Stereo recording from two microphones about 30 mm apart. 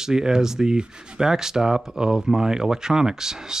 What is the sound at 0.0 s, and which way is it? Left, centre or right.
Speech, right.